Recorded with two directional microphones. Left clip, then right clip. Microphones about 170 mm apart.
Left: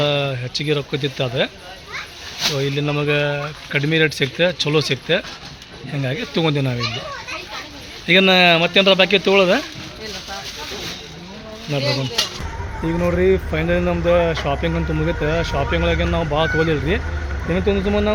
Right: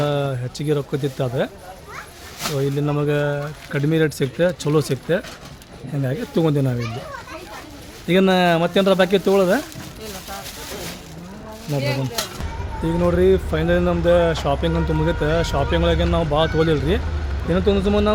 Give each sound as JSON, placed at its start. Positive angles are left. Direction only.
{"t": 0.0, "sound": "speech", "side_deg": -15}
{"t": 2.7, "sound": "speech", "side_deg": -10}
{"t": 8.0, "sound": "speech", "side_deg": -10}
{"t": 11.7, "sound": "speech", "side_deg": 5}
{"t": 13.0, "sound": "speech", "side_deg": -10}